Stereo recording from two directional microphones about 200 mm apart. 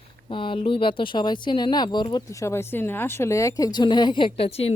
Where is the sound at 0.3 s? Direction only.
25° left (ahead or behind).